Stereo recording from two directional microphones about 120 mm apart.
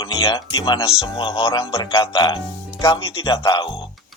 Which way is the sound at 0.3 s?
40° left (ahead or behind).